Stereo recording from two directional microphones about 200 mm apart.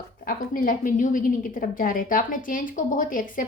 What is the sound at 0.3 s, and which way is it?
A woman's voice, 45° left (ahead or behind).